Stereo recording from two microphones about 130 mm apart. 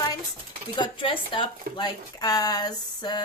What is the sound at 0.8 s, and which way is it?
Speech, 40° left (ahead or behind).